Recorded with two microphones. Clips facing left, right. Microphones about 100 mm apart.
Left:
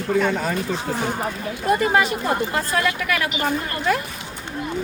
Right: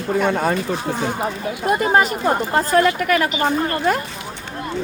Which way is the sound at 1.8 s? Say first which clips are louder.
Right 3 dB; 35° right (ahead or behind).